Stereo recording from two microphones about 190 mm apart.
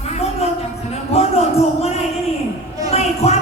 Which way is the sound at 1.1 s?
35° left (ahead or behind).